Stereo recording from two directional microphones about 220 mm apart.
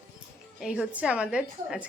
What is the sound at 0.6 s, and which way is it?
A woman's voice, 5° right (ahead or behind).